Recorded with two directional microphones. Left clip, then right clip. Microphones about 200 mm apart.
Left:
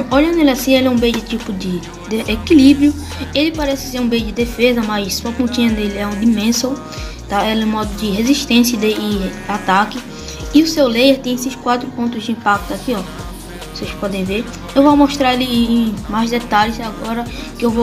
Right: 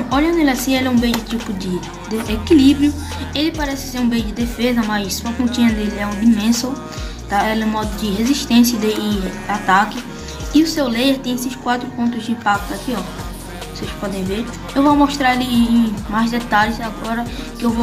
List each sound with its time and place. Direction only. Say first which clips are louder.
0.1 s a woman's voice: left 3 dB; 15° left (ahead or behind)
14.9 s a woman's voice: even; 15° left (ahead or behind)